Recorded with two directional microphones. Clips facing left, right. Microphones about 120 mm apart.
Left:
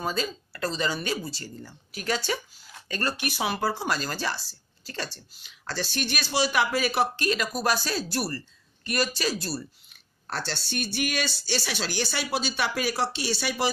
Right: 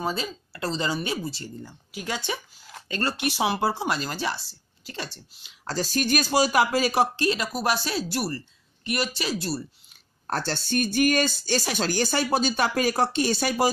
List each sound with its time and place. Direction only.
0.0 s speech: 20° right (ahead or behind)
5.7 s speech: 40° right (ahead or behind); by 9.6 s 20° right (ahead or behind)
10.2 s speech: 45° right (ahead or behind)